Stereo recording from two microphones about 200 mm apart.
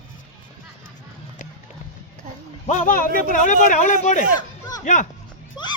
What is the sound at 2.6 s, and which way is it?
Speech, 40° left (ahead or behind).